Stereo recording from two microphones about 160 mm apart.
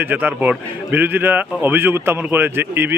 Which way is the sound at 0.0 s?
10° right (ahead or behind).